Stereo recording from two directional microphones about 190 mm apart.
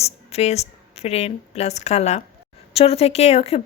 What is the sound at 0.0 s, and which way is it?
A woman's voice, 35° left (ahead or behind).